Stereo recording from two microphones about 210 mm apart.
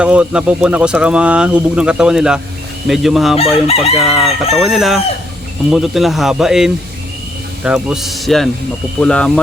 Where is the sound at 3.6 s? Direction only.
30° left (ahead or behind).